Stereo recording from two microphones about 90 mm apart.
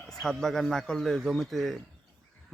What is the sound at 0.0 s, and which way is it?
A man's voice, centre (ahead or behind).